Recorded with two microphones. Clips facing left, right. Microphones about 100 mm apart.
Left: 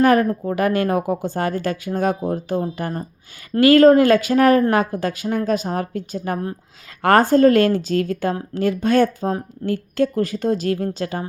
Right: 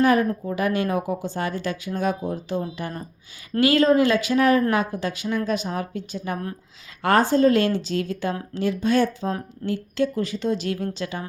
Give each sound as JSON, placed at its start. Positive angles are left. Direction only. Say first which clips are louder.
{"t": 0.0, "sound": "speech", "louder": "left 4 dB", "side_deg": 50}